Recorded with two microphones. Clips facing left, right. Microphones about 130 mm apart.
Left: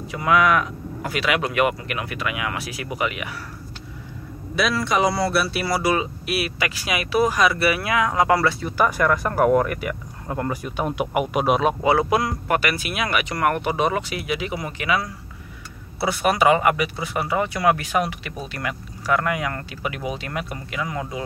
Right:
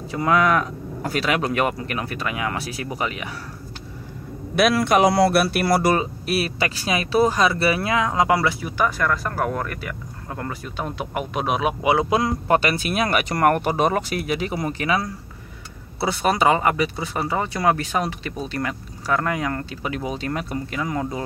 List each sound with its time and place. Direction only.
0.1 s speech: 35° right (ahead or behind)
4.6 s speech: 55° right (ahead or behind); by 8.7 s 10° right (ahead or behind)
8.9 s speech: 15° left (ahead or behind)
11.8 s speech: 20° right (ahead or behind); by 21.2 s 35° right (ahead or behind)